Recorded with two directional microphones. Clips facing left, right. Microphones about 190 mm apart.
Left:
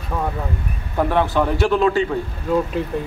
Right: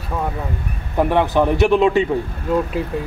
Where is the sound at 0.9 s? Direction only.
15° right (ahead or behind).